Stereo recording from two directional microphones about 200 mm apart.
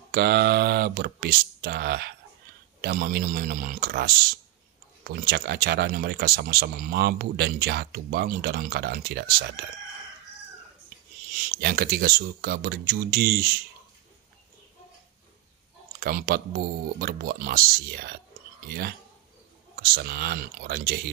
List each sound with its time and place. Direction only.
0.1 s speech: 55° right (ahead or behind)
11.3 s speech: 45° right (ahead or behind)
16.0 s speech: 50° right (ahead or behind)